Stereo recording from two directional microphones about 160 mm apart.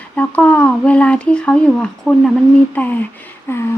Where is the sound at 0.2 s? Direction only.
10° left (ahead or behind).